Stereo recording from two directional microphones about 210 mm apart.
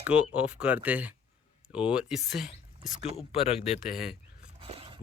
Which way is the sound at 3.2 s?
30° left (ahead or behind).